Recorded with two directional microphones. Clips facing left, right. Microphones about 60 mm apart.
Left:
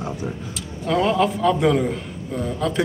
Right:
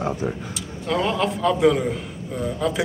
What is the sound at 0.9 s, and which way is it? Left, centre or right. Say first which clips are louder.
A man's voice: left 3 dB; centre.